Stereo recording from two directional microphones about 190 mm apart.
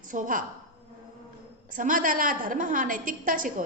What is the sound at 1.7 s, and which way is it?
A woman's voice, 45° right (ahead or behind).